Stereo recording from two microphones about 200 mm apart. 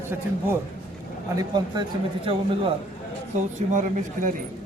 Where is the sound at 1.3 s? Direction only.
20° right (ahead or behind).